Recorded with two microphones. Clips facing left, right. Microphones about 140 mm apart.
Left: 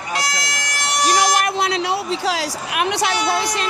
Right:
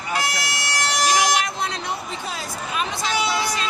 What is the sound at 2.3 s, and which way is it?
A woman's voice, 80° left.